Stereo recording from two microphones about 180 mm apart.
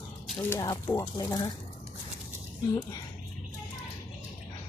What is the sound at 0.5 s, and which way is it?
Speech, 15° left (ahead or behind).